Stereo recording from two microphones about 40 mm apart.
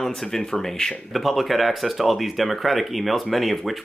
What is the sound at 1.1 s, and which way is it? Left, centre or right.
Speech, centre.